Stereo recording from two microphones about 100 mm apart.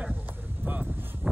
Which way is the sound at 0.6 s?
15° right (ahead or behind).